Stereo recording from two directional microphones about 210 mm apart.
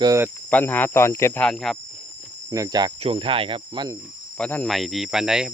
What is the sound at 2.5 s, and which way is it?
Cricket, 15° right (ahead or behind).